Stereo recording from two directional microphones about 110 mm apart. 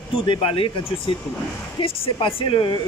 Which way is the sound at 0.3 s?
60° left (ahead or behind).